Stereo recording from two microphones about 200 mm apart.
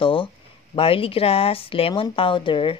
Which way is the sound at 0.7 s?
30° left (ahead or behind).